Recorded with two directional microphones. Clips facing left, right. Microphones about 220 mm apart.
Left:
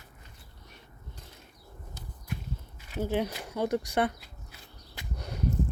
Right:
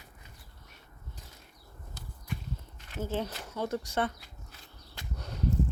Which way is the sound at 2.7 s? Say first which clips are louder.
Left 4 dB; 15° left (ahead or behind).